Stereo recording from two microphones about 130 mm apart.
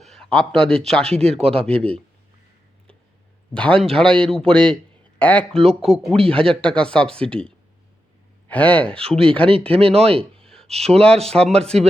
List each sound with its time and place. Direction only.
0.0 s speech: 5° left (ahead or behind)
1.2 s speech: 50° right (ahead or behind)
1.6 s speech: 10° left (ahead or behind)
3.5 s speech: 10° left (ahead or behind)
9.0 s speech: 45° right (ahead or behind)
10.4 s a sound: 5° left (ahead or behind)
10.8 s speech: 5° left (ahead or behind)